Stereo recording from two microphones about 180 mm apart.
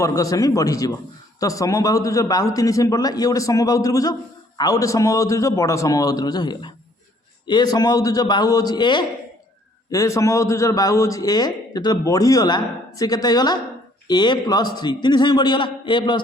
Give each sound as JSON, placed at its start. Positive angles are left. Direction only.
{"t": 0.0, "sound": "a man's voice", "side_deg": 20}